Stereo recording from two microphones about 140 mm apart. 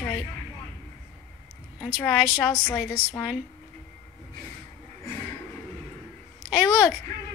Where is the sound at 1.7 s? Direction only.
5° right (ahead or behind).